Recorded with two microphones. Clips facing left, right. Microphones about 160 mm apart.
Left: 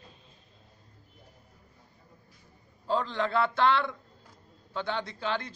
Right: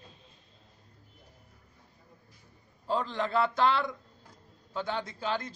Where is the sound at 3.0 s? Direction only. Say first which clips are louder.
Even; 10° right (ahead or behind).